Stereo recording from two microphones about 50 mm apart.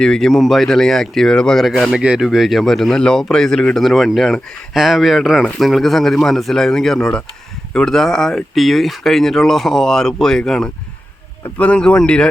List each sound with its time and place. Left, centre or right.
0.0 s speech: centre
1.6 s speech: centre
2.0 s speech: centre
2.2 s speech: centre
3.0 s speech: centre
3.8 s speech: centre
11.5 s speech: left